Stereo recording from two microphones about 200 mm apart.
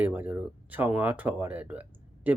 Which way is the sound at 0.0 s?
10° right (ahead or behind).